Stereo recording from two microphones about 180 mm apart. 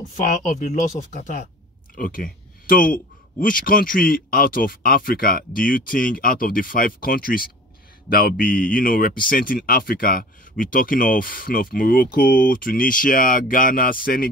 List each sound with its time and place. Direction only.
0.1 s speech: 45° left (ahead or behind)